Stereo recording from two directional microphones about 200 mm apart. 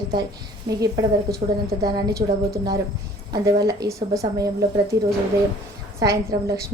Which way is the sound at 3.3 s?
20° right (ahead or behind).